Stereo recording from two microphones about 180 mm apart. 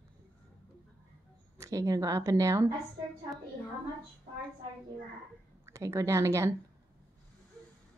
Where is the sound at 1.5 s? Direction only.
20° right (ahead or behind).